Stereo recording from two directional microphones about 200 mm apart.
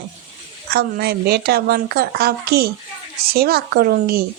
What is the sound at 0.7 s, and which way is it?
Speech, 50° right (ahead or behind).